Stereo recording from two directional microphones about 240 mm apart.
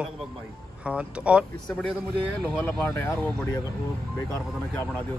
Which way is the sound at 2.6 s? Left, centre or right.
Centre.